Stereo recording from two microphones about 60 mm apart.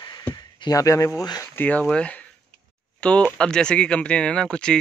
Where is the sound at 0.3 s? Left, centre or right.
Left.